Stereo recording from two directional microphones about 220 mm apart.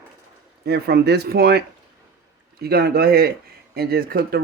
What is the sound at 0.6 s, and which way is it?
Speech, 45° right (ahead or behind).